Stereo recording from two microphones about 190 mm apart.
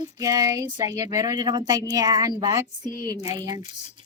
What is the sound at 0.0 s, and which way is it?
Speech, 20° right (ahead or behind).